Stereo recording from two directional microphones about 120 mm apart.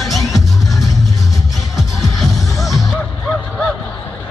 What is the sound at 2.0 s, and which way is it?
Music, centre (ahead or behind).